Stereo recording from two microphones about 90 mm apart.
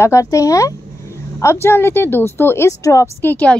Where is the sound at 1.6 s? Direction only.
25° left (ahead or behind).